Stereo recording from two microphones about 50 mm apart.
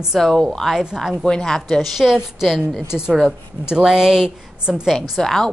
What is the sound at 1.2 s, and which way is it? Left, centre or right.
Speech, centre.